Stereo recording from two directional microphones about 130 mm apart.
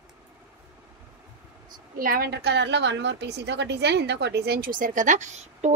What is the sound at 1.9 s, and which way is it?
Speech, 90° right.